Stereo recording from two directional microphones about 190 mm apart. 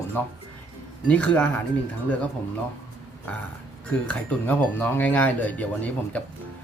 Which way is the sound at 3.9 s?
10° left (ahead or behind).